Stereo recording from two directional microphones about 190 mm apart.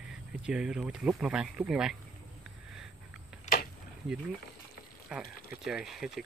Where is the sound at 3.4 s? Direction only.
45° left (ahead or behind).